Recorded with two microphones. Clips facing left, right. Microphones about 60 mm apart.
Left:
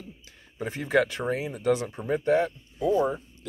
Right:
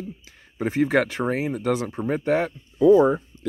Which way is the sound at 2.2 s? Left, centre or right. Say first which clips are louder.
Left 1 dB; right.